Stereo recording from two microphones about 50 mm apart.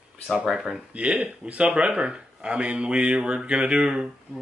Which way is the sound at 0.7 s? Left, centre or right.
Right.